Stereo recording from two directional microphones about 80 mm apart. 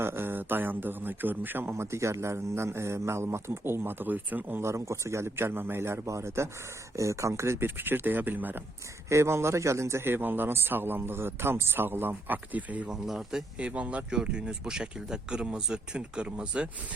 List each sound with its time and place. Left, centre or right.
0.0 s a man's voice: right
1.7 s a man's voice: right
4.6 s a man's voice: right
9.0 s a man's voice: right; by 12.9 s centre
12.9 s speech: centre